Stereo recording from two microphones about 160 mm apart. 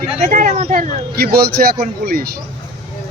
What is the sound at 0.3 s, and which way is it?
Speech, 60° right (ahead or behind).